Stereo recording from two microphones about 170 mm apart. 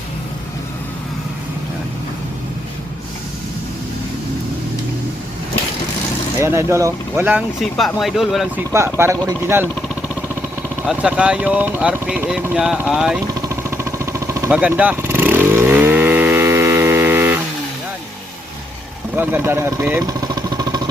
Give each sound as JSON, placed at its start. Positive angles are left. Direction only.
{"t": 6.4, "sound": "speech", "side_deg": -15}
{"t": 7.6, "sound": "speech", "side_deg": 0}
{"t": 8.7, "sound": "speech", "side_deg": -15}
{"t": 10.8, "sound": "speech", "side_deg": -5}
{"t": 13.5, "sound": "vehicle", "side_deg": -15}
{"t": 14.5, "sound": "motorcycle", "side_deg": -10}
{"t": 19.1, "sound": "speech", "side_deg": -10}
{"t": 20.1, "sound": "vehicle", "side_deg": -25}